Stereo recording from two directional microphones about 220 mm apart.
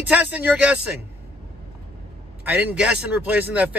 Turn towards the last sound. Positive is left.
turn(degrees=-5)  # may be behind; listen again after turning